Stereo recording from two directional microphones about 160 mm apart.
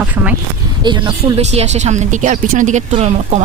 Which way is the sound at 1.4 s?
45° right (ahead or behind).